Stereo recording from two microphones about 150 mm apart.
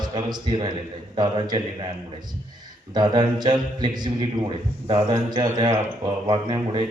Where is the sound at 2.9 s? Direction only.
30° right (ahead or behind).